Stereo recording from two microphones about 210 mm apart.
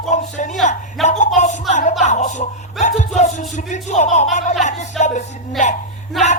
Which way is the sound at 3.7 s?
35° left (ahead or behind).